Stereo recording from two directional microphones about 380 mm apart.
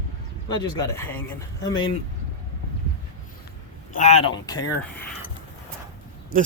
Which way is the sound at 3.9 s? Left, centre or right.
Centre.